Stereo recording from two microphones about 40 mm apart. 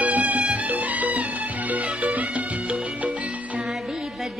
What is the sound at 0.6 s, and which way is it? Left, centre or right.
Music, right.